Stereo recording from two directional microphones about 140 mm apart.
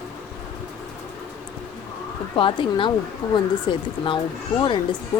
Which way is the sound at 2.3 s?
35° left (ahead or behind).